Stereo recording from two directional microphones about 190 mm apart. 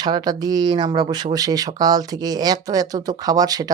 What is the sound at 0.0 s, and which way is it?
Speech, 20° right (ahead or behind).